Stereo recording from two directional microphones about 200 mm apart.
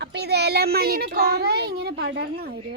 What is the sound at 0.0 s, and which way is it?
A child's voice, 55° right (ahead or behind).